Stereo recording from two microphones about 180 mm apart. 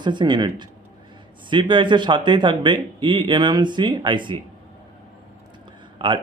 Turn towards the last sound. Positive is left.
turn(degrees=-25)  # may be behind; listen again after turning